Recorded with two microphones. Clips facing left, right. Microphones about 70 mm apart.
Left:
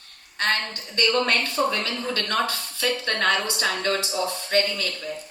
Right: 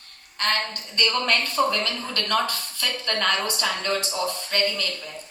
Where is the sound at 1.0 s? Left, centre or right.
Left.